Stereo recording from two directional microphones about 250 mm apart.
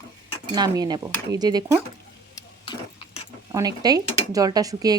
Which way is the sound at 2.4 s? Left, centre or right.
Centre.